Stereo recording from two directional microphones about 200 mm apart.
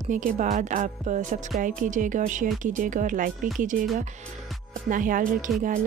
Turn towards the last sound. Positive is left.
turn(degrees=-40)  # may be behind; listen again after turning